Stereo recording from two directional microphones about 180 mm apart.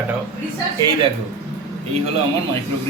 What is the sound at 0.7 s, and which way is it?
Speech, 20° right (ahead or behind).